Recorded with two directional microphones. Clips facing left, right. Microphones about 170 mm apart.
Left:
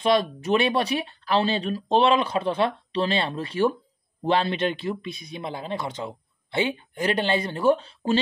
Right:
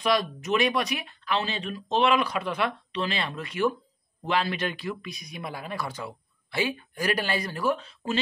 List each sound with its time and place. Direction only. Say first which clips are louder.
0.0 s speech: left 4 dB; 25° left (ahead or behind)